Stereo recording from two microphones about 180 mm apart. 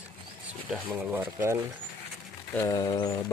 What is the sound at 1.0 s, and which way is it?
Speech, 10° right (ahead or behind).